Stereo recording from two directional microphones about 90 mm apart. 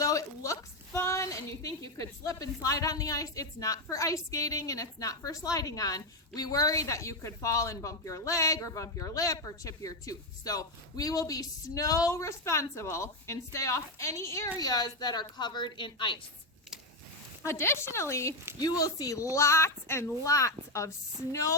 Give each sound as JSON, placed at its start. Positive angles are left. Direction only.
{"t": 0.0, "sound": "a woman's voice", "side_deg": 40}
{"t": 14.6, "sound": "a woman's voice", "side_deg": 45}
{"t": 17.4, "sound": "a woman's voice", "side_deg": 30}